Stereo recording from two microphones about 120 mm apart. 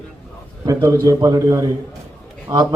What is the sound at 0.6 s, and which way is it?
A man's voice, 30° right (ahead or behind).